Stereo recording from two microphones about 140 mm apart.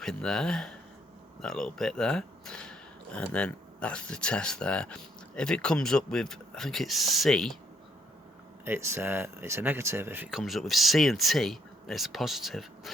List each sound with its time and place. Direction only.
0.0 s speech: 5° left (ahead or behind)
8.6 s speech: 15° right (ahead or behind)
10.3 s speech: centre (ahead or behind)